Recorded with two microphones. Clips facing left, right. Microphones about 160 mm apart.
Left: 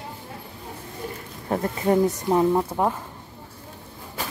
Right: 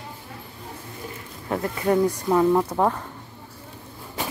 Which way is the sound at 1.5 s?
25° left (ahead or behind).